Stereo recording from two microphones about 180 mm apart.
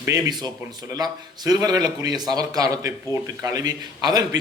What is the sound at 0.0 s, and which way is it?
Speech, 20° right (ahead or behind).